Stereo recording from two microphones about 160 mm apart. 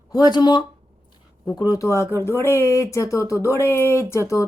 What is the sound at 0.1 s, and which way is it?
Speech, 25° left (ahead or behind).